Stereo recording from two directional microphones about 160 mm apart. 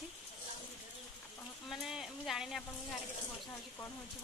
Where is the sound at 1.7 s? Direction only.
Centre (ahead or behind).